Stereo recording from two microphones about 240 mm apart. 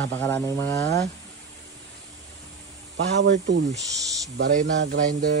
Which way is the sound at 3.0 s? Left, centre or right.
Right.